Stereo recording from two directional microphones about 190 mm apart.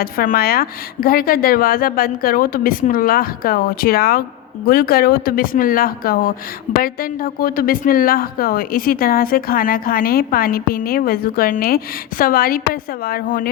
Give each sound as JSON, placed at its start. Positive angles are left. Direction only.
{"t": 0.0, "sound": "a woman's voice", "side_deg": 50}